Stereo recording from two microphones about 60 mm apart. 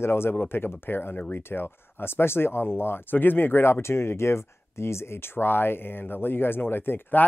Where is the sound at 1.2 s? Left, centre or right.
Left.